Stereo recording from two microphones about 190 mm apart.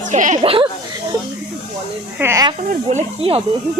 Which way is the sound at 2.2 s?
15° right (ahead or behind).